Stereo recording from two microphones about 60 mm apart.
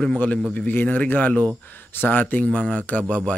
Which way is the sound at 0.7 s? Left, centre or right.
Left.